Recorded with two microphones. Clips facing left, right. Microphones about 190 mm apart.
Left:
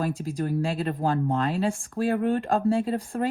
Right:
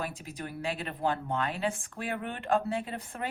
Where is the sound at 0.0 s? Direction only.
35° left (ahead or behind).